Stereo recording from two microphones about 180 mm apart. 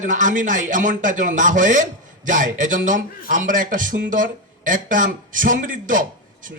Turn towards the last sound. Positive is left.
turn(degrees=-50)  # may be behind; listen again after turning